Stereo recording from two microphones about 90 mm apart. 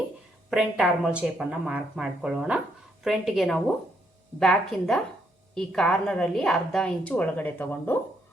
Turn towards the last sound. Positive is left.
turn(degrees=20)  # may be behind; listen again after turning